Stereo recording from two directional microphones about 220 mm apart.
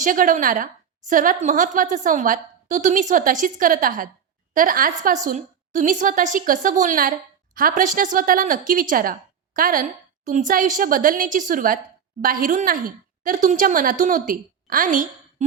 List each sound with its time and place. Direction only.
0.0 s a woman's voice: 35° right (ahead or behind)